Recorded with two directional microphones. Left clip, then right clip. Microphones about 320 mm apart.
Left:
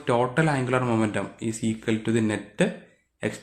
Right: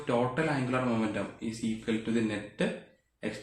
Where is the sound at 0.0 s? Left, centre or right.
Left.